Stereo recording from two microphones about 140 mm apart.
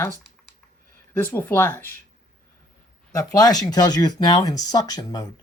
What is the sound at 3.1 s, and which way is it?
Speech, 25° left (ahead or behind).